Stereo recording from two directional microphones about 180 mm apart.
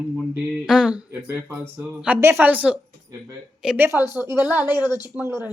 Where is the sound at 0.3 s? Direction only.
5° right (ahead or behind).